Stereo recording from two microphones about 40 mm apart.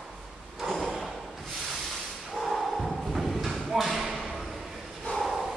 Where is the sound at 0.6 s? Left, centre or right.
Centre.